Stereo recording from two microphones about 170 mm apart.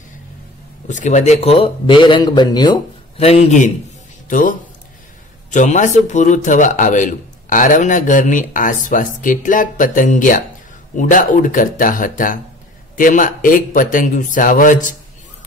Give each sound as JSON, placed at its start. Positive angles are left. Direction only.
{"t": 0.8, "sound": "speech", "side_deg": 45}
{"t": 3.2, "sound": "a man's voice", "side_deg": 35}